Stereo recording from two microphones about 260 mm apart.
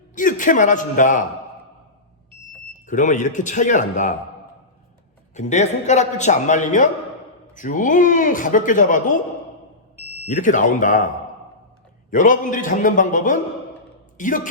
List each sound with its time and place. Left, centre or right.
0.2 s a man's voice: left
2.7 s a man's voice: left
5.3 s a man's voice: left
10.0 s smoke detector: centre
10.2 s a man's voice: left
12.1 s a man's voice: left